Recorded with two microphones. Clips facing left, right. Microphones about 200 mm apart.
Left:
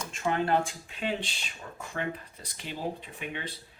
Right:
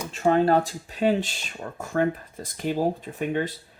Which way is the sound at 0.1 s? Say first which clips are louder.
Right 8 dB; 35° right (ahead or behind).